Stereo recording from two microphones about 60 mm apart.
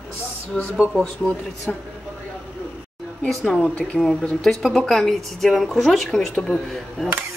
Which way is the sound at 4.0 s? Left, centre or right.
Centre.